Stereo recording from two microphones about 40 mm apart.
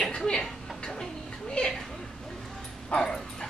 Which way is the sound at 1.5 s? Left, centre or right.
Centre.